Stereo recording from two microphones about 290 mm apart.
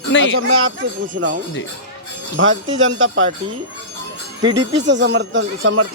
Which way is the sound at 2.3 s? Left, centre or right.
Right.